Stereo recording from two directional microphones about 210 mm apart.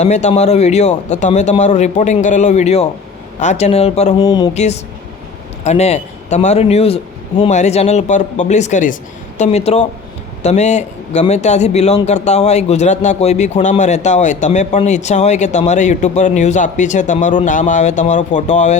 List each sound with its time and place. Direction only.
0.0 s a man's voice: 35° left (ahead or behind)
4.2 s speech: 20° left (ahead or behind)
4.5 s a man's voice: 30° left (ahead or behind)